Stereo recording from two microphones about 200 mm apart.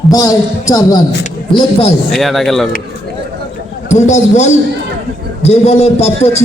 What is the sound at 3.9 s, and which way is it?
A man's voice, 35° left (ahead or behind).